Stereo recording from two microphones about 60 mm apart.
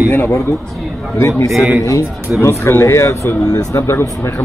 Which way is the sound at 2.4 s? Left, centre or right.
Left.